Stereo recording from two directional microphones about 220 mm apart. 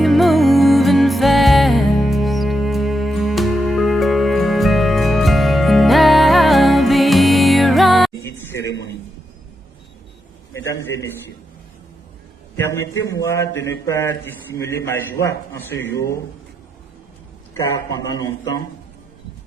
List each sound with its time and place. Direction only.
0.0 s music: centre (ahead or behind)
8.2 s a sound: 10° left (ahead or behind)
8.7 s a sound: 50° left (ahead or behind)
10.5 s a man's voice: 10° left (ahead or behind)
12.5 s a man's voice: 10° left (ahead or behind)
12.8 s a man's voice: 55° left (ahead or behind)
13.2 s a man's voice: 10° left (ahead or behind)
18.2 s a man's voice: 15° left (ahead or behind)